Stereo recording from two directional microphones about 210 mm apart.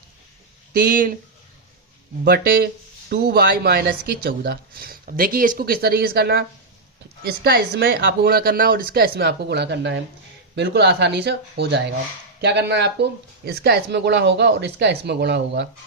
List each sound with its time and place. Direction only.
0.7 s speech: 45° right (ahead or behind)
2.2 s speech: 45° right (ahead or behind)